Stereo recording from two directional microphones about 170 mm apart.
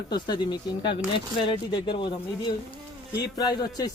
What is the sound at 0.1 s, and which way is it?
Speech, 25° left (ahead or behind).